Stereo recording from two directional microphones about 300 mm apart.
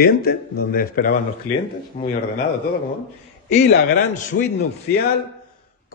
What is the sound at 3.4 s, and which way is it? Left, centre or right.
A man's voice, left.